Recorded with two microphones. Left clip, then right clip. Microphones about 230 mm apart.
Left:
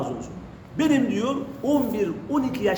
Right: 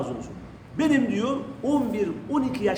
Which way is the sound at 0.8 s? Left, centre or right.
Centre.